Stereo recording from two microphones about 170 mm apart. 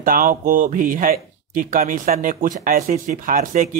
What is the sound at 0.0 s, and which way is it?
Speech, 55° right (ahead or behind).